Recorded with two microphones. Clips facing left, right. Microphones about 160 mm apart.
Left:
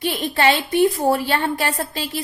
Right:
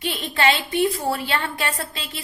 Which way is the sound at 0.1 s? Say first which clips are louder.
Left 2 dB; 40° left (ahead or behind).